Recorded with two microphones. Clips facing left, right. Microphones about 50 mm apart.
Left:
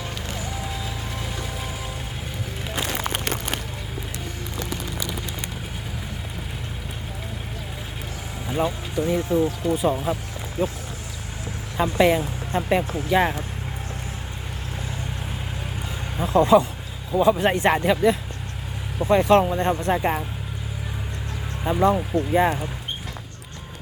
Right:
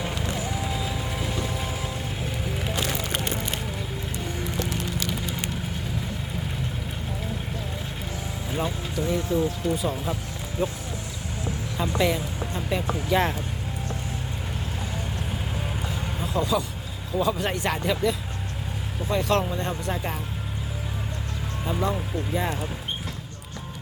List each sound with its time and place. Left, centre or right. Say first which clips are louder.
8.4 s speech: left 5 dB; centre
11.8 s speech: left 6 dB; left
13.1 s speech: left 3 dB; centre
16.2 s speech: left 10 dB; left
17.1 s speech: left 6 dB; left
21.6 s speech: left 7 dB; left